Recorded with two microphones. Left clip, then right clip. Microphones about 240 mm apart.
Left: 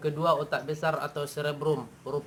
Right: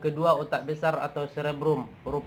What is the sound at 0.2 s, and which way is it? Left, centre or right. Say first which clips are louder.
Speech: right 2 dB; left.